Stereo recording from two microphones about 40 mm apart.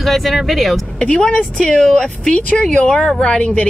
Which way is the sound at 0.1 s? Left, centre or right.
Centre.